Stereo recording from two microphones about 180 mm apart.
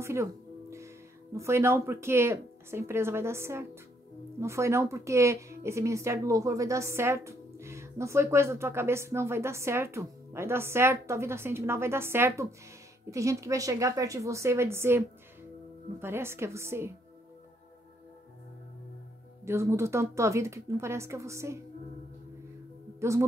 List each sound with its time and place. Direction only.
0.0 s music: 15° right (ahead or behind)
1.3 s a woman's voice: 15° right (ahead or behind)
19.4 s a woman's voice: 15° right (ahead or behind)
22.9 s speech: 15° right (ahead or behind)